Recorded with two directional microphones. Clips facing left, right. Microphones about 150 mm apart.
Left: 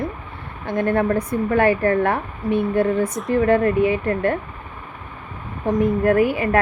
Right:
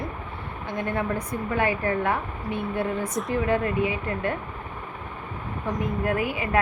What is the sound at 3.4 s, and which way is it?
A woman's voice, 60° left (ahead or behind).